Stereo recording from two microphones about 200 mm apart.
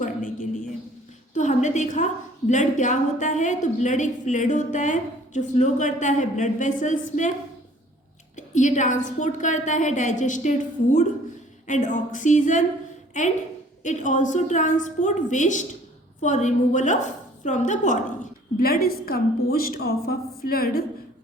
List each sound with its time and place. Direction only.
0.0 s a sound: 40° left (ahead or behind)
1.4 s a woman's voice: 35° left (ahead or behind)
8.4 s a woman's voice: 35° left (ahead or behind)
18.6 s a woman's voice: 50° left (ahead or behind)